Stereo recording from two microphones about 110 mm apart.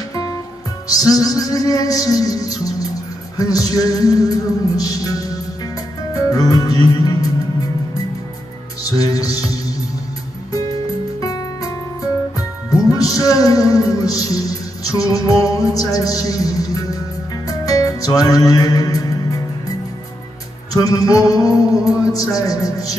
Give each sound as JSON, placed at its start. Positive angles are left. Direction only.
{"t": 0.1, "sound": "music", "side_deg": 35}
{"t": 8.8, "sound": "music", "side_deg": 35}
{"t": 11.1, "sound": "music", "side_deg": 35}
{"t": 20.7, "sound": "music", "side_deg": 35}